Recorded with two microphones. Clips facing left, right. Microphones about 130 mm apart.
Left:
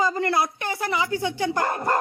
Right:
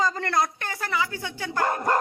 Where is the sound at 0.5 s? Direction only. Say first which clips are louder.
Left 3 dB; 15° left (ahead or behind).